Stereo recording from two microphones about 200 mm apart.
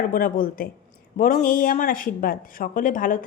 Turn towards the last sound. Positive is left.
turn(degrees=40)  # may be behind; listen again after turning